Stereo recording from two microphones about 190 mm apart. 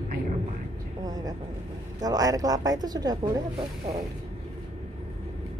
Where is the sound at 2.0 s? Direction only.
20° right (ahead or behind).